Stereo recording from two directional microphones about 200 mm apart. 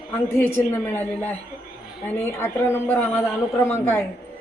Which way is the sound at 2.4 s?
10° left (ahead or behind).